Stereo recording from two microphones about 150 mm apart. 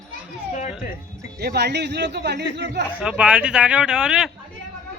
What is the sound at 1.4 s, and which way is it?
Speech, 90° right.